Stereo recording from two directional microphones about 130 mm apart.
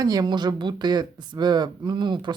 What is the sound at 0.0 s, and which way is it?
Speech, 30° right (ahead or behind).